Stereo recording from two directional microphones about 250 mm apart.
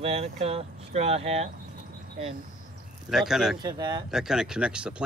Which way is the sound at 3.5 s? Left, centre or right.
Centre.